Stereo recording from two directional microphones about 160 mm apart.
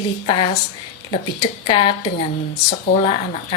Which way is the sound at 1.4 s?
30° left (ahead or behind).